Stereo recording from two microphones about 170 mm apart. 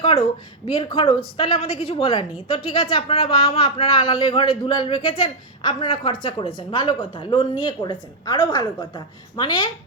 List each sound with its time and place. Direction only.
0.0 s a woman's voice: 35° left (ahead or behind)